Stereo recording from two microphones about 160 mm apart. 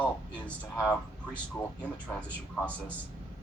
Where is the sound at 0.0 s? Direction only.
10° left (ahead or behind).